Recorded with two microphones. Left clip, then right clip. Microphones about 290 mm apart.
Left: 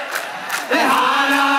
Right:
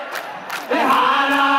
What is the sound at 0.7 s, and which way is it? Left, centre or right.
Chant, centre.